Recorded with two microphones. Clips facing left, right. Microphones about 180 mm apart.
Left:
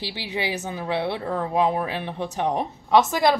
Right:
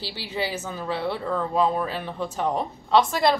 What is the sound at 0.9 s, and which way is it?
Speech, 70° left (ahead or behind).